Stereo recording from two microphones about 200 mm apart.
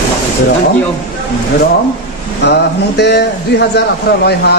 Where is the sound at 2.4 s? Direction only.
60° left (ahead or behind).